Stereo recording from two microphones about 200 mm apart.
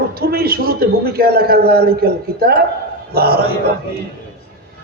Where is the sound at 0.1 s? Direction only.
50° right (ahead or behind).